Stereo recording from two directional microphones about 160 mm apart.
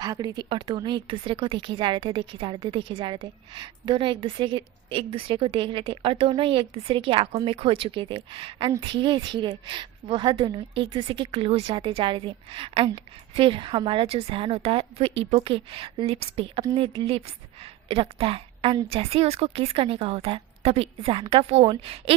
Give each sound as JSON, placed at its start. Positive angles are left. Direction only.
{"t": 0.0, "sound": "a woman's voice", "side_deg": -25}